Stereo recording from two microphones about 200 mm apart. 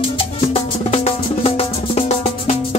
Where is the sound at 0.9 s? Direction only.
30° left (ahead or behind).